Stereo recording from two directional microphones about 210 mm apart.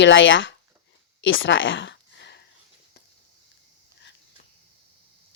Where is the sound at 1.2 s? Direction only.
65° left (ahead or behind).